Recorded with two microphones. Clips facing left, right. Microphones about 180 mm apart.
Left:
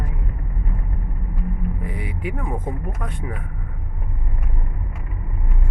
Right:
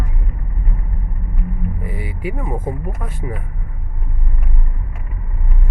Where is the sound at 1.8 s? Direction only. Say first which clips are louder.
Right 2 dB; 5° right (ahead or behind).